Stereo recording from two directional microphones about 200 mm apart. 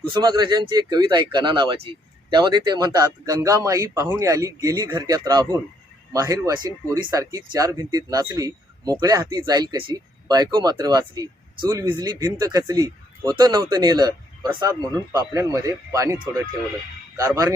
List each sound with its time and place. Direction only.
0.0 s a man's voice: 20° right (ahead or behind)